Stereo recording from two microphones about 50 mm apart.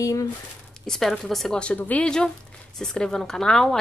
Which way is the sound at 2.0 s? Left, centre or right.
Centre.